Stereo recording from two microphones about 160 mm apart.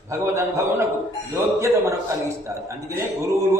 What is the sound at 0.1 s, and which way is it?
A man's voice, 20° right (ahead or behind).